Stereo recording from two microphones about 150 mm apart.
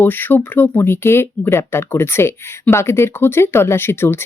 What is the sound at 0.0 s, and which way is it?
Speech, 15° left (ahead or behind).